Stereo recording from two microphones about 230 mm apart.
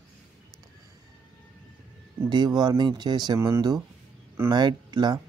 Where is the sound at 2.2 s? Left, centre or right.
Centre.